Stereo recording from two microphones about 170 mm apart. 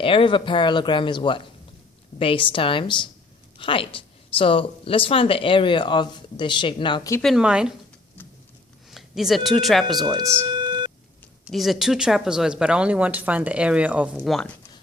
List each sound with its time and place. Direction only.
0.0 s a woman's voice: 30° left (ahead or behind)
7.2 s speech: centre (ahead or behind)
8.9 s speech: centre (ahead or behind)
10.6 s busy signal: 25° right (ahead or behind)
11.4 s speech: centre (ahead or behind)